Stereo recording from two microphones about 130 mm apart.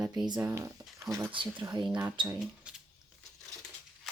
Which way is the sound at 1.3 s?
40° right (ahead or behind).